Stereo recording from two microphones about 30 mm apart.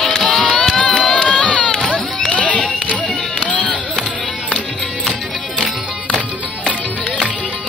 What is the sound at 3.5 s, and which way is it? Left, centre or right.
Chop, left.